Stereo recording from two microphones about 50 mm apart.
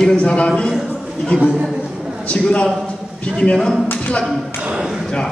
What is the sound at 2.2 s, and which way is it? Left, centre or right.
A man's voice, left.